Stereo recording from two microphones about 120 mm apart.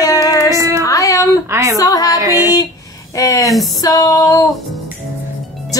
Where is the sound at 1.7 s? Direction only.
30° left (ahead or behind).